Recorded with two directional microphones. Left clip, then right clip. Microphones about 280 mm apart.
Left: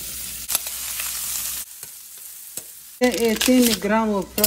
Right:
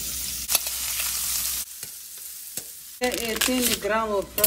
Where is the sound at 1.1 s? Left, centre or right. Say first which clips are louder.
Right 1 dB; centre.